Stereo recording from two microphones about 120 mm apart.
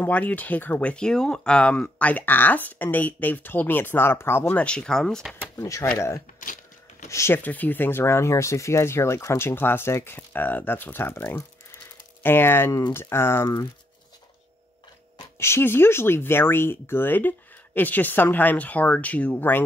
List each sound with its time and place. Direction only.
0.0 s speech: 15° left (ahead or behind)
5.4 s speech: 25° left (ahead or behind)
15.3 s speech: 20° left (ahead or behind)